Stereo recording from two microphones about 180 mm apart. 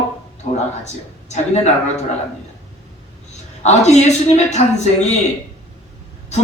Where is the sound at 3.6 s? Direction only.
40° left (ahead or behind).